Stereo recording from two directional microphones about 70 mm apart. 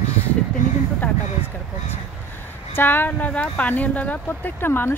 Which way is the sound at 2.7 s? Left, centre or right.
Left.